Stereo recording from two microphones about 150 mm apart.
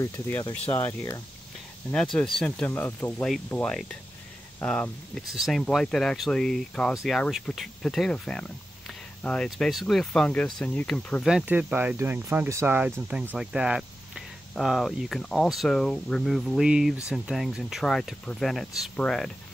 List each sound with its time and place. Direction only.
0.0 s speech: 15° left (ahead or behind)
2.1 s speech: 5° left (ahead or behind)
11.2 s speech: 5° right (ahead or behind)